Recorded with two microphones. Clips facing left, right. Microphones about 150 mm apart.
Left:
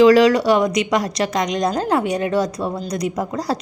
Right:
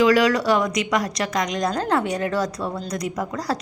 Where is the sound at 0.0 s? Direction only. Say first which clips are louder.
Left 6 dB; 30° left (ahead or behind).